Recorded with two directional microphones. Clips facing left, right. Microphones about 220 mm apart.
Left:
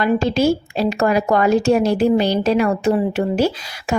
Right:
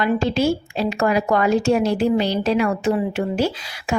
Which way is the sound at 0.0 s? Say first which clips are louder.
Left 3 dB; 40° left (ahead or behind).